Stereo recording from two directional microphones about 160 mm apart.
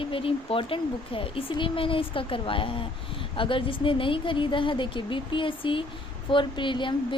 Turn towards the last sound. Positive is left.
turn(degrees=30)  # may be behind; listen again after turning